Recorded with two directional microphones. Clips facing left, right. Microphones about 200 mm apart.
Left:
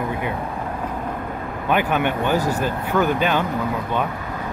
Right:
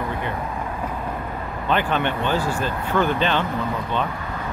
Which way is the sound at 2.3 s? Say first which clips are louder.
Left 2 dB; 40° left (ahead or behind).